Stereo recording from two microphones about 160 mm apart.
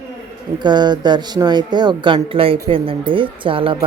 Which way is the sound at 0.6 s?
25° right (ahead or behind).